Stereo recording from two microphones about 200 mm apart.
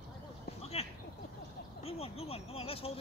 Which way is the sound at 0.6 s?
30° left (ahead or behind).